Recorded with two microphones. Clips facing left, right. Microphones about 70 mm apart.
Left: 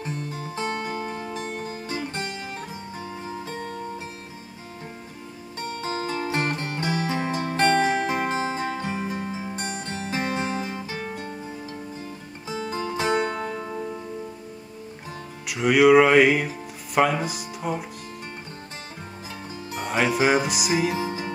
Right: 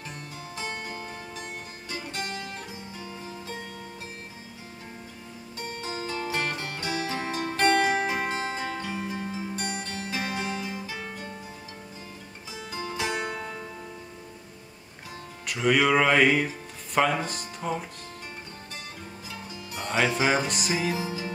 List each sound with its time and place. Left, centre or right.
0.3 s music: left
5.8 s music: left
12.5 s music: left
15.4 s music: centre
19.8 s music: centre
20.9 s speech: left